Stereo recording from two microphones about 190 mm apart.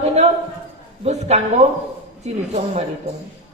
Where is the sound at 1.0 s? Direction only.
35° right (ahead or behind).